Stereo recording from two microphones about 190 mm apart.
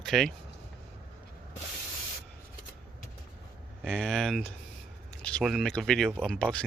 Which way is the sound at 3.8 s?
5° left (ahead or behind).